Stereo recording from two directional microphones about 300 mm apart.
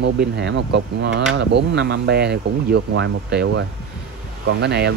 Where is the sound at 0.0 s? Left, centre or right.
Right.